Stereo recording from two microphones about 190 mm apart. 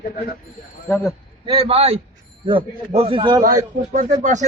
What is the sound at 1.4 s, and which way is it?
A man's voice, 30° right (ahead or behind).